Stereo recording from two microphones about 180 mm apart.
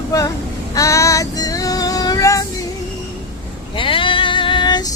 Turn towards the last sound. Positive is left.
turn(degrees=25)  # may be behind; listen again after turning